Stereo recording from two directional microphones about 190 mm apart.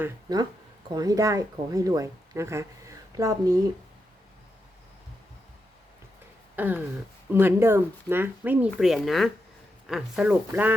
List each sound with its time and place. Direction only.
0.0 s speech: 20° right (ahead or behind)
6.6 s speech: 10° right (ahead or behind)